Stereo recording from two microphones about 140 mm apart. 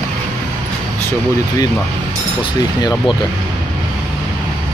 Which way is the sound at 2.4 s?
30° left (ahead or behind).